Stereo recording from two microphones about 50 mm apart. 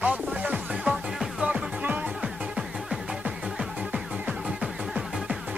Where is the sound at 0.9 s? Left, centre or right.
Centre.